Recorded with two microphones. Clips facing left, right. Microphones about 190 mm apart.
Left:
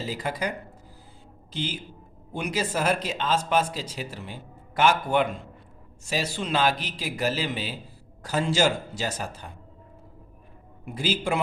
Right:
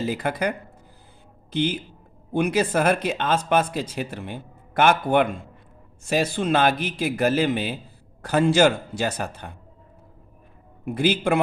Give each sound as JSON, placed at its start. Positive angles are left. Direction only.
{"t": 0.0, "sound": "speech", "side_deg": -60}
{"t": 1.5, "sound": "speech", "side_deg": -60}
{"t": 10.8, "sound": "speech", "side_deg": -60}